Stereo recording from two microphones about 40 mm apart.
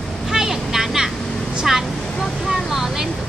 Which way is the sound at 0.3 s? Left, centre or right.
Centre.